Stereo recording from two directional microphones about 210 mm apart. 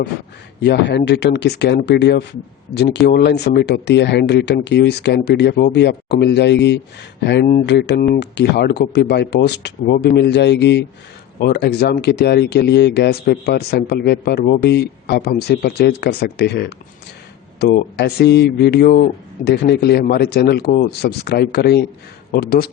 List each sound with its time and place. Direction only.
0.6 s speech: 55° left (ahead or behind)